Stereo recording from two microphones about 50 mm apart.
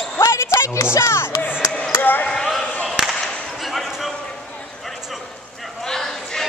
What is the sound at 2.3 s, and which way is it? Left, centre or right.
Basketball bounce, centre.